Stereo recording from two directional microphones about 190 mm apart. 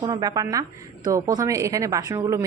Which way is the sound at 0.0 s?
20° right (ahead or behind).